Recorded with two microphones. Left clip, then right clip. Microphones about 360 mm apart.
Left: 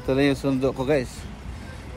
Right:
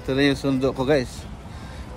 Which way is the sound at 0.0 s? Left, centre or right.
Centre.